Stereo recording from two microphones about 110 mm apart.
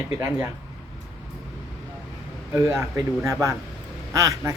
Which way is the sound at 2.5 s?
30° right (ahead or behind).